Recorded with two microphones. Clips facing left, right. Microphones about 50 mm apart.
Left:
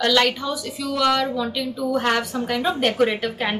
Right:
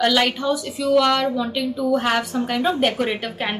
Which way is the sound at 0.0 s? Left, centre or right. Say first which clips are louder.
Right 1 dB; centre.